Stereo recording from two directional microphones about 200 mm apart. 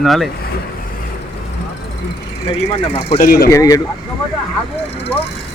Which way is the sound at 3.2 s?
50° left (ahead or behind).